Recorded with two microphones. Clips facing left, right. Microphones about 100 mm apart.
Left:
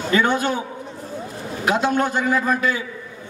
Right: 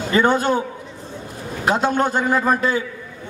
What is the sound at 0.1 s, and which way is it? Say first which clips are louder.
Speech: right 3 dB; 40° right (ahead or behind).